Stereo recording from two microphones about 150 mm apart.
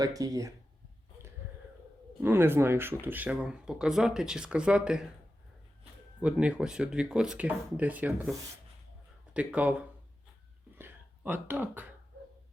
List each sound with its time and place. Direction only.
0.0 s speech: 25° right (ahead or behind)
2.2 s speech: 15° right (ahead or behind)
6.2 s speech: 5° right (ahead or behind)
9.3 s speech: 10° right (ahead or behind)
10.8 s a sound: 15° right (ahead or behind)